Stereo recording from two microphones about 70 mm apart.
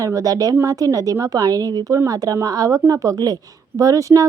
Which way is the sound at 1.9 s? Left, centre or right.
Right.